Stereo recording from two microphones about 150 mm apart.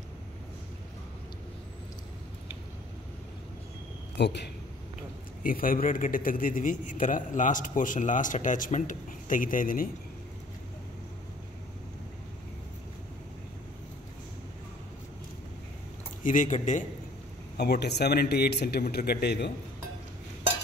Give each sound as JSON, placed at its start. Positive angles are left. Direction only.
{"t": 5.4, "sound": "a man's voice", "side_deg": 70}
{"t": 16.2, "sound": "a man's voice", "side_deg": 60}
{"t": 17.6, "sound": "a man's voice", "side_deg": 90}